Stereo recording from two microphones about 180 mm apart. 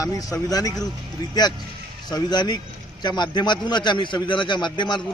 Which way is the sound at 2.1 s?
25° left (ahead or behind).